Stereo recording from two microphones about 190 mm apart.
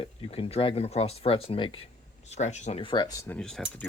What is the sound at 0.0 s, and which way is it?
Speech, 30° left (ahead or behind).